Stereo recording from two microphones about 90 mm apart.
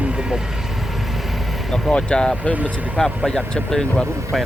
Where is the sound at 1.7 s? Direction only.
10° left (ahead or behind).